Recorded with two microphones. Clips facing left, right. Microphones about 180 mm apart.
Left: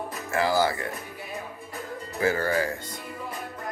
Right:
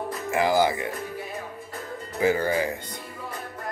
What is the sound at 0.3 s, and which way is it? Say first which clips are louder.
Speech: right 2 dB; 15° right (ahead or behind).